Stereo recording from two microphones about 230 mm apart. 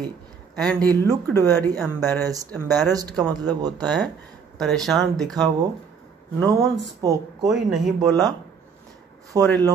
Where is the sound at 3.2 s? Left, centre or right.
Centre.